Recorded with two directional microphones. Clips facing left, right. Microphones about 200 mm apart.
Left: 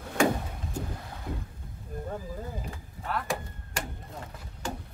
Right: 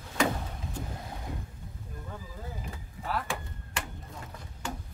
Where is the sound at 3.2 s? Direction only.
40° left (ahead or behind).